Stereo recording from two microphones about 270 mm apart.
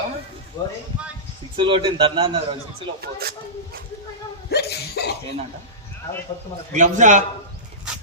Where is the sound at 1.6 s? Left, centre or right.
Centre.